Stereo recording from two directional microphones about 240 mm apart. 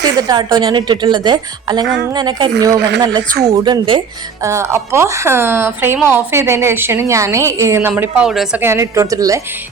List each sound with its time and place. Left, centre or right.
0.0 s a woman's voice: centre